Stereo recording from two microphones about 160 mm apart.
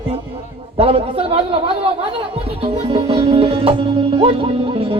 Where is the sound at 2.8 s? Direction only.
35° right (ahead or behind).